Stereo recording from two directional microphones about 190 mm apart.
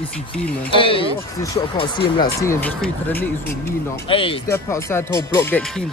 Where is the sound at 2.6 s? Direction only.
10° left (ahead or behind).